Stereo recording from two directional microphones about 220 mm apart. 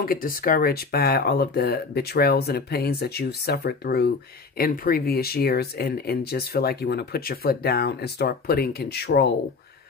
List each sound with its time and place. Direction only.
0.0 s speech: 40° left (ahead or behind)